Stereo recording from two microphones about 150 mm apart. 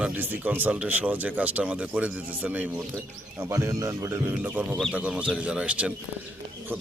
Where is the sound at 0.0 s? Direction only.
10° right (ahead or behind).